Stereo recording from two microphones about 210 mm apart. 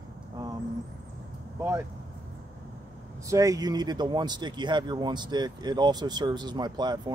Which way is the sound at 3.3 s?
15° right (ahead or behind).